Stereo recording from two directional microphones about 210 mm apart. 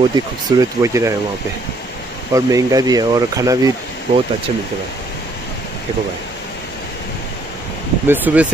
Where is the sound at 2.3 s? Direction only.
15° right (ahead or behind).